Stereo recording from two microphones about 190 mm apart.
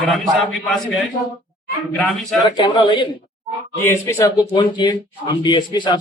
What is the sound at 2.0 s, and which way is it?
Speech, centre (ahead or behind).